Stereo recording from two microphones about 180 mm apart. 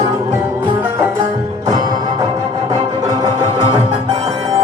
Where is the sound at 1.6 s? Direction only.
15° right (ahead or behind).